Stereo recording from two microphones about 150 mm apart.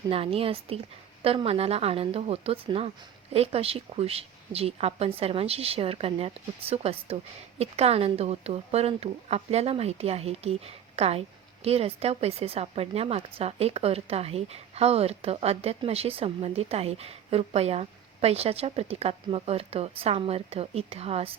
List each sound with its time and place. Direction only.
0.1 s a woman's voice: 40° right (ahead or behind)